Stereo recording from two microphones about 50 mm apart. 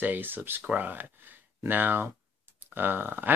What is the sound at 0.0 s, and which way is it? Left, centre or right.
Speech, right.